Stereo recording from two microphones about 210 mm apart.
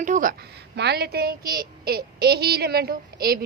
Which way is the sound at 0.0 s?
40° right (ahead or behind).